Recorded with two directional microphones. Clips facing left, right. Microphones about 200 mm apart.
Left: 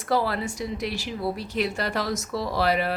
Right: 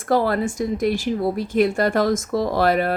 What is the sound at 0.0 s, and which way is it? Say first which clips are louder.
Speech: right 6 dB; 50° right (ahead or behind).